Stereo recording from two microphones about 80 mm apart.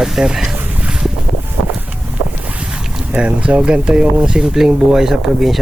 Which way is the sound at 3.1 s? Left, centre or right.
Centre.